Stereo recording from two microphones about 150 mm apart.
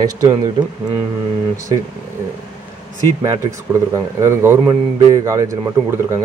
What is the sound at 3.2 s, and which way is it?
A man's voice, 20° right (ahead or behind).